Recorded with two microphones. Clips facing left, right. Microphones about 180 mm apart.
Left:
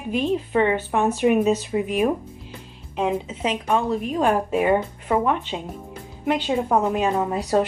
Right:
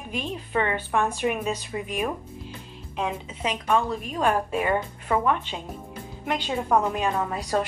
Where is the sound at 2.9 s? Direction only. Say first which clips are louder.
Left 6 dB; 15° left (ahead or behind).